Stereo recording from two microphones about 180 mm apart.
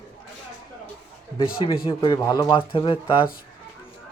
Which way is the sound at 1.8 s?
30° left (ahead or behind).